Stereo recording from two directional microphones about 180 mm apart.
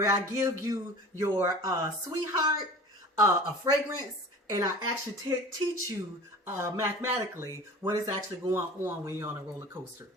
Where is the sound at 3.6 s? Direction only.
20° right (ahead or behind).